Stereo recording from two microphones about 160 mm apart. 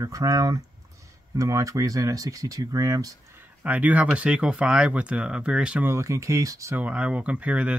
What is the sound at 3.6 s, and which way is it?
Speech, 10° right (ahead or behind).